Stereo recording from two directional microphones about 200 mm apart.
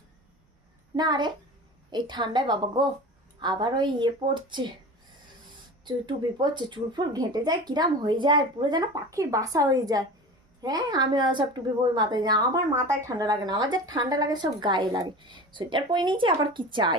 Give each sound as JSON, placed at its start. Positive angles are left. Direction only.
{"t": 0.9, "sound": "speech", "side_deg": -20}
{"t": 5.8, "sound": "speech", "side_deg": -20}